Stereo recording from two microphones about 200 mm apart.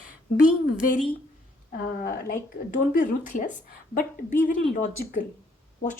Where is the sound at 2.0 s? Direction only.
45° left (ahead or behind).